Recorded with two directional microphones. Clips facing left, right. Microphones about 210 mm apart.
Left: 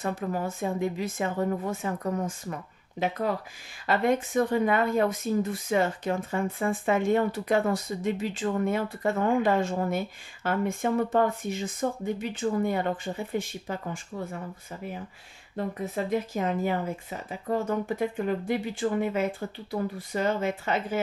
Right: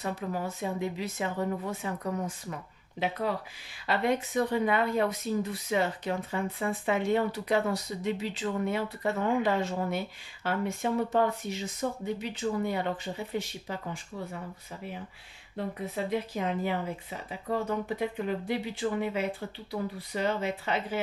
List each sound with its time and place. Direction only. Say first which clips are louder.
0.0 s speech: left 3 dB; 50° left (ahead or behind)
15.5 s speech: left 3 dB; 45° left (ahead or behind)